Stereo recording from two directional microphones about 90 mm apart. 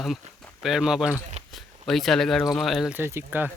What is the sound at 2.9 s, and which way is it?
Speech, 25° right (ahead or behind).